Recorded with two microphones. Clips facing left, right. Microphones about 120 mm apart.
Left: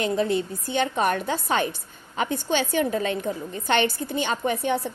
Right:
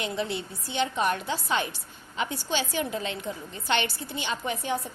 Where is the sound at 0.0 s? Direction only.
45° left (ahead or behind).